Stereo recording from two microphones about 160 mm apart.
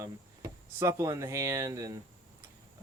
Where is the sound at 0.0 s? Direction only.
20° right (ahead or behind).